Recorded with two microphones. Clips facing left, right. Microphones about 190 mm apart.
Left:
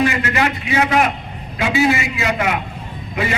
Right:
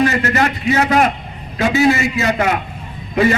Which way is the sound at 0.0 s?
40° right (ahead or behind).